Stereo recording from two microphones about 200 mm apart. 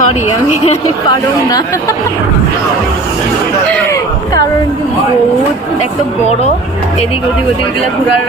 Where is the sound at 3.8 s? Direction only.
15° left (ahead or behind).